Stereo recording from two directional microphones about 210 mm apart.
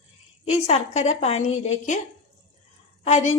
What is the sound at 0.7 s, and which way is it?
A woman's voice, 30° left (ahead or behind).